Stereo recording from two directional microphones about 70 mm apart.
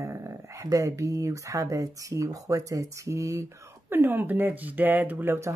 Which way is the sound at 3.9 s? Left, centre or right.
Right.